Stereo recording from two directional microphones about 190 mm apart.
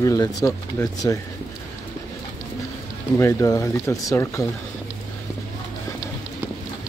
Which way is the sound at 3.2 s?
15° left (ahead or behind).